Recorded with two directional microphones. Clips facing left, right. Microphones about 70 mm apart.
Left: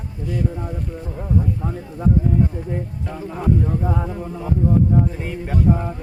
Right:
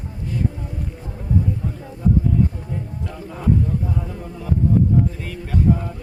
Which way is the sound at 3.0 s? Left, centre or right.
Centre.